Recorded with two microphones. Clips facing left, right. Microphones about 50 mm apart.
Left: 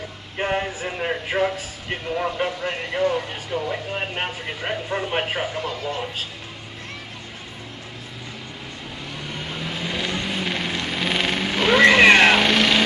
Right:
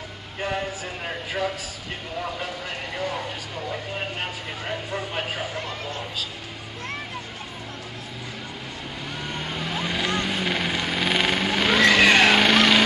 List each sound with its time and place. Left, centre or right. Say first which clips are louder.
0.4 s speech: left 4 dB; left
3.0 s speech: left 8 dB; centre
4.1 s speech: left 3 dB; left
9.2 s vehicle: right 1 dB; centre
11.8 s vehicle: left 4 dB; left
12.3 s vehicle: even; centre